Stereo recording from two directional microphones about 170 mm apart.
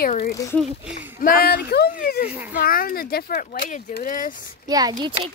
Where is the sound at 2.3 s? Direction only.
10° right (ahead or behind).